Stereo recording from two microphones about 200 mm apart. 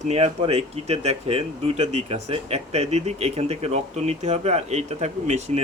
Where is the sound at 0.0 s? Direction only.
30° right (ahead or behind).